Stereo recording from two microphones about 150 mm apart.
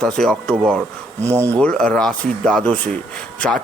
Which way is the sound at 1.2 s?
20° right (ahead or behind).